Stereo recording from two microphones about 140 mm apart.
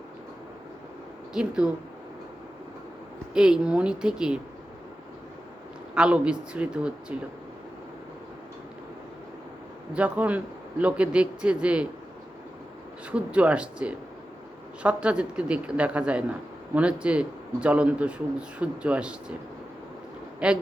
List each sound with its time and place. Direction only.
1.3 s speech: 5° right (ahead or behind)
3.3 s speech: 5° right (ahead or behind)
5.9 s speech: 10° right (ahead or behind)
9.9 s speech: 10° right (ahead or behind)
13.1 s speech: 10° right (ahead or behind)
20.4 s speech: 5° right (ahead or behind)